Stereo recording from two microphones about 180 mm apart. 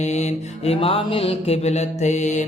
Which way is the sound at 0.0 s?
40° left (ahead or behind).